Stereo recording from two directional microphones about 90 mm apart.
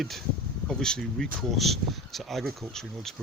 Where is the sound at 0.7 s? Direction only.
5° left (ahead or behind).